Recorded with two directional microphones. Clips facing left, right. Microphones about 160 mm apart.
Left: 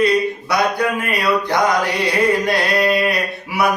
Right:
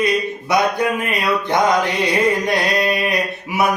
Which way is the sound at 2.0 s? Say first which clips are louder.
Left 1 dB; 20° right (ahead or behind).